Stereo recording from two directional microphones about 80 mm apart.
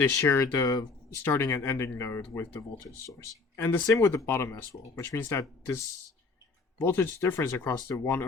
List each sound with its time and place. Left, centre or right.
0.1 s speech: left
0.7 s speech: left
1.2 s speech: left
3.8 s speech: left